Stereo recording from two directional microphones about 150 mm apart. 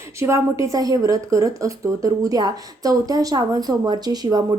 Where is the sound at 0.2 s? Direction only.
20° right (ahead or behind).